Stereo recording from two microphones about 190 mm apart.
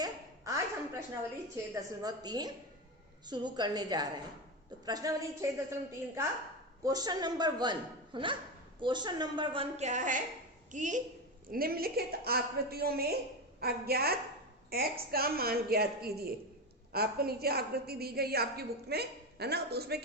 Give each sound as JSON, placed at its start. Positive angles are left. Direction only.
{"t": 0.0, "sound": "a sound", "side_deg": -15}
{"t": 1.7, "sound": "a man's voice", "side_deg": -20}
{"t": 6.8, "sound": "a man's voice", "side_deg": -20}